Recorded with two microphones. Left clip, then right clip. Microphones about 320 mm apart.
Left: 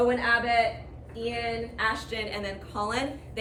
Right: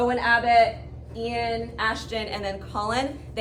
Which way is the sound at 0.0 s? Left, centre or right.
Centre.